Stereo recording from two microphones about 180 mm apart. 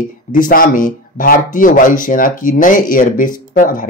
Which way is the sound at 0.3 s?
50° left (ahead or behind).